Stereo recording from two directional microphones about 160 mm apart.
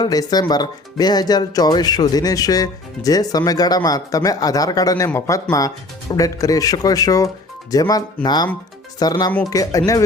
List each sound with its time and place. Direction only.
0.0 s speech: 25° left (ahead or behind)